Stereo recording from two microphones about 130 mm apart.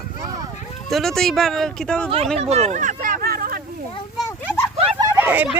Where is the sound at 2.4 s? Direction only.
55° right (ahead or behind); by 3.6 s 90° right.